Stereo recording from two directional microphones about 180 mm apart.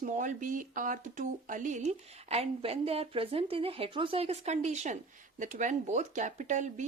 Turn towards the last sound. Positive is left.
turn(degrees=-45)  # may be behind; listen again after turning